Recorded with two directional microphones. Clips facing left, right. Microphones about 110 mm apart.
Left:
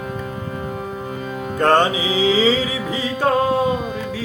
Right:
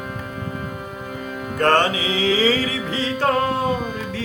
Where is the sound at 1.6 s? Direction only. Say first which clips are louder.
Left 2 dB; 15° left (ahead or behind).